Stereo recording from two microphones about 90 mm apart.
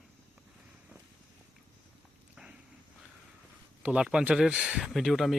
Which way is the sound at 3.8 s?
10° right (ahead or behind).